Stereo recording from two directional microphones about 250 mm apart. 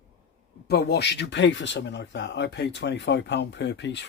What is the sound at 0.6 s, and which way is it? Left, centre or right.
Speech, left.